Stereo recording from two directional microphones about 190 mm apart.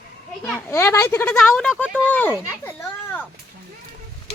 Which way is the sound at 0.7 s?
15° left (ahead or behind).